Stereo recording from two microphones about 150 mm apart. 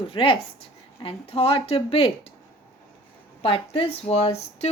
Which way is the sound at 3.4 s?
35° left (ahead or behind).